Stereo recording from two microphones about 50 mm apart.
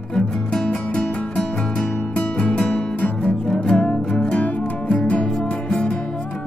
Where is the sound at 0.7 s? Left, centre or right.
Left.